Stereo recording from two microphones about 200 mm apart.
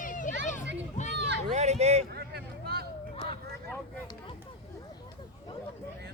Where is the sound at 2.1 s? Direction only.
50° right (ahead or behind).